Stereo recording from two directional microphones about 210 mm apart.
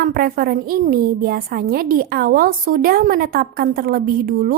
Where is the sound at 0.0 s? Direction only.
45° right (ahead or behind).